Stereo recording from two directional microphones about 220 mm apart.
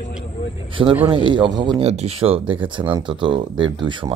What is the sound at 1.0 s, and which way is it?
Speech, 20° right (ahead or behind).